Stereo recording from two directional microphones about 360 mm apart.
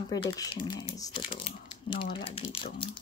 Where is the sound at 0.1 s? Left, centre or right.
Centre.